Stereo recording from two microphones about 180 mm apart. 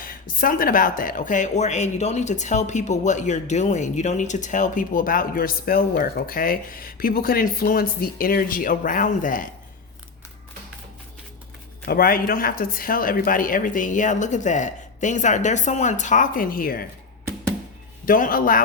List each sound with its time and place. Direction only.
0.0 s speech: 50° left (ahead or behind)
11.9 s speech: 55° left (ahead or behind)
18.0 s speech: 50° left (ahead or behind)